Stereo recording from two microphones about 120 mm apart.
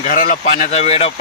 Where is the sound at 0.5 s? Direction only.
60° left (ahead or behind).